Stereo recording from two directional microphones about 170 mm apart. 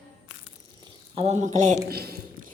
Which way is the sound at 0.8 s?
35° right (ahead or behind).